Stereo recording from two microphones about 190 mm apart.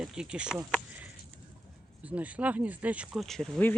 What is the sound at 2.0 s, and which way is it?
Speech, 5° right (ahead or behind).